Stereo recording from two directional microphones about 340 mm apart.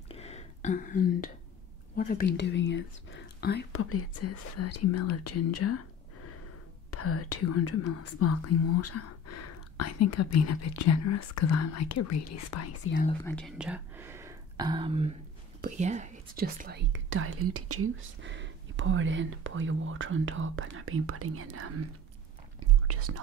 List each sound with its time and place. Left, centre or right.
0.1 s whispering: centre
2.0 s speech: left
6.9 s speech: left
13.2 s speech: centre; by 21.7 s right
22.8 s speech: right